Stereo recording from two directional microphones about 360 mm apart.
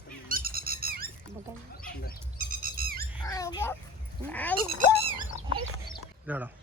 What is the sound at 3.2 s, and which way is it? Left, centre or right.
Speech, centre.